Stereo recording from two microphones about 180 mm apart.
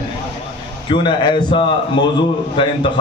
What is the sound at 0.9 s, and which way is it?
A man's voice, 25° left (ahead or behind).